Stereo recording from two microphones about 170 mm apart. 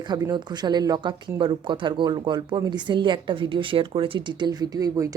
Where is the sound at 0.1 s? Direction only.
25° right (ahead or behind).